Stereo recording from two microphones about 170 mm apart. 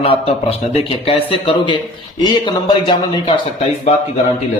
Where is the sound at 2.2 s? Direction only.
25° left (ahead or behind).